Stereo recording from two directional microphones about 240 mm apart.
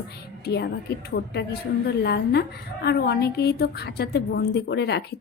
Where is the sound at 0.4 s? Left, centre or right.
Left.